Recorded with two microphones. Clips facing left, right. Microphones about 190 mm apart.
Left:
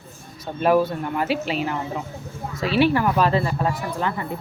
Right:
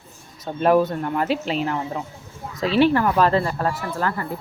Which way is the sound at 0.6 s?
5° left (ahead or behind).